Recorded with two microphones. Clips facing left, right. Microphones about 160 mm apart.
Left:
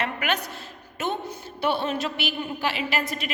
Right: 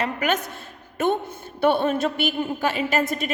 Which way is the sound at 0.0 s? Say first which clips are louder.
Right 4 dB; 40° right (ahead or behind).